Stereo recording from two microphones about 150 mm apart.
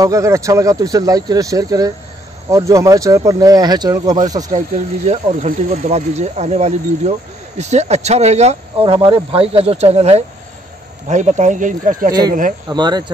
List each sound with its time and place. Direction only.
0.0 s speech: 20° right (ahead or behind)
4.6 s speech: 45° right (ahead or behind)
8.8 s speech: 35° right (ahead or behind); by 12.1 s 65° right (ahead or behind)
12.1 s speech: 25° right (ahead or behind)